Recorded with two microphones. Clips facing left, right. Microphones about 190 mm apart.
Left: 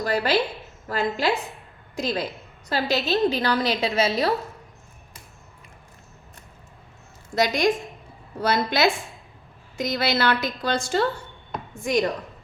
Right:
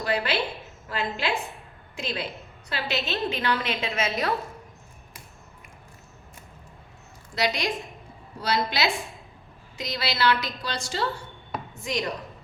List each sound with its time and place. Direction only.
0.0 s a woman's voice: 40° left (ahead or behind)
7.3 s a woman's voice: 50° left (ahead or behind)